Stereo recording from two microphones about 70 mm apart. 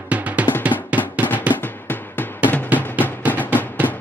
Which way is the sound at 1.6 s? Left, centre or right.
Left.